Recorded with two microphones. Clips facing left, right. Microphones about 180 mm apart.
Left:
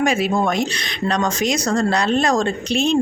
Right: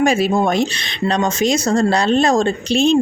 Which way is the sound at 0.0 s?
30° right (ahead or behind).